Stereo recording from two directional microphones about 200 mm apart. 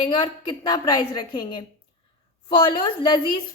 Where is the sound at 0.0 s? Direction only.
25° left (ahead or behind).